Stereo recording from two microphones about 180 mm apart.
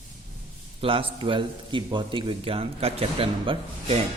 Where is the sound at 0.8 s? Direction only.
30° right (ahead or behind).